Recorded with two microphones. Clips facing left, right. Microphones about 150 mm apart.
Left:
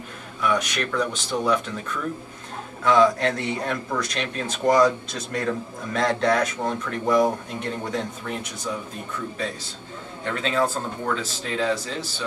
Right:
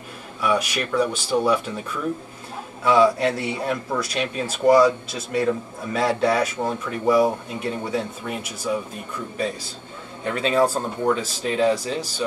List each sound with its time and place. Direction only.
0.4 s speech: 10° right (ahead or behind)
10.2 s speech: 15° right (ahead or behind)